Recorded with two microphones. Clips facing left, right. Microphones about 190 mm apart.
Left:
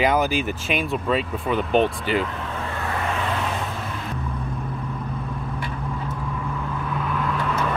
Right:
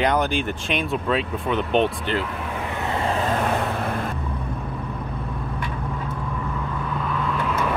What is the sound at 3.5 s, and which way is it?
Vehicle, 60° right (ahead or behind).